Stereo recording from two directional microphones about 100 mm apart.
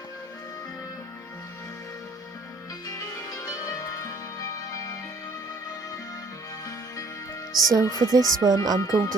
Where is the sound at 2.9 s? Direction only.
35° left (ahead or behind).